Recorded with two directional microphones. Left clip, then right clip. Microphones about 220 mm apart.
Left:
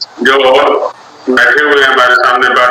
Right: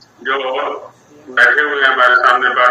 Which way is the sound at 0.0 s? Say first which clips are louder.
Left 11 dB; 50° left (ahead or behind).